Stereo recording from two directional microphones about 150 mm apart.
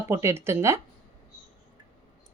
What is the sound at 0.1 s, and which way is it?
Speech, 20° right (ahead or behind).